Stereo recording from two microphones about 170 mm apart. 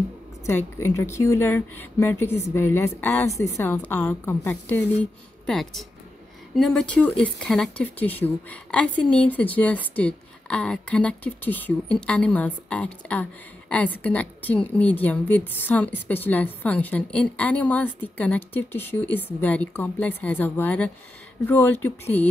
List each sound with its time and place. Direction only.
0.5 s speech: 15° left (ahead or behind)
5.5 s speech: centre (ahead or behind)